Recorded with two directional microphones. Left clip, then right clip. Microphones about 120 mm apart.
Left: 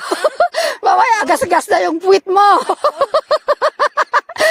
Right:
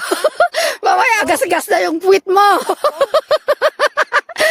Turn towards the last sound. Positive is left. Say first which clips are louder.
# even
turn(degrees=-30)  # may be behind; listen again after turning